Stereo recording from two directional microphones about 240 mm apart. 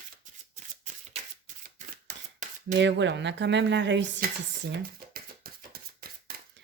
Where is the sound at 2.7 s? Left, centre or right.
Right.